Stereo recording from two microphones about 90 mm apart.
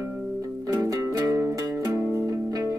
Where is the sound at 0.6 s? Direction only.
40° right (ahead or behind).